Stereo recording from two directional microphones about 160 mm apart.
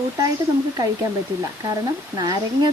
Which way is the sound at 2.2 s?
25° right (ahead or behind).